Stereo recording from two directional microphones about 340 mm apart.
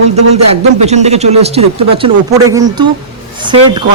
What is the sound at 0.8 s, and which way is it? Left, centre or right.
Speech, centre.